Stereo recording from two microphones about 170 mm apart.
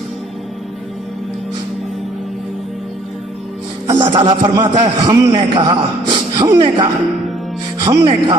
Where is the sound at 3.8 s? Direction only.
25° right (ahead or behind).